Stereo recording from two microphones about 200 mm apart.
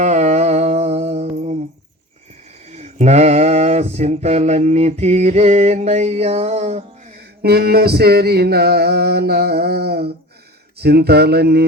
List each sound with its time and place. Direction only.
0.0 s music: 35° right (ahead or behind)
2.6 s mantra: 35° right (ahead or behind)
7.2 s a sound: 50° right (ahead or behind)